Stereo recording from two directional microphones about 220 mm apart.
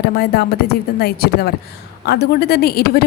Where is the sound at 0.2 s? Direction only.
45° left (ahead or behind).